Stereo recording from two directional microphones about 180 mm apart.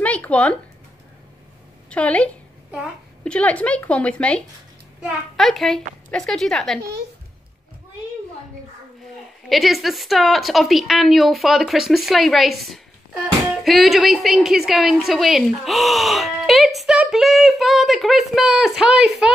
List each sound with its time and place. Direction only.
0.0 s speech: 5° left (ahead or behind)
1.9 s a woman's voice: 5° left (ahead or behind)
6.8 s speech: 65° right (ahead or behind)
9.5 s a woman's voice: centre (ahead or behind)